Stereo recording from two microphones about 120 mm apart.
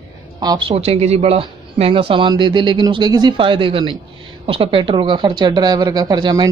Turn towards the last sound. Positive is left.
turn(degrees=-35)  # may be behind; listen again after turning